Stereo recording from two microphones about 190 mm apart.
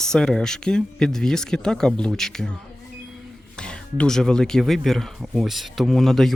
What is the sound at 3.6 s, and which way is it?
Speech, 5° left (ahead or behind).